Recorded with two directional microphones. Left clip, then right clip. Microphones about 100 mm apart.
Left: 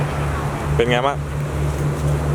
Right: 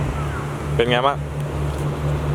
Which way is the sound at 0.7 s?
15° right (ahead or behind).